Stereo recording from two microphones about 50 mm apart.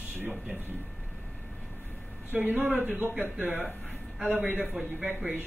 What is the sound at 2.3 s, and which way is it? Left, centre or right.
Speech, right.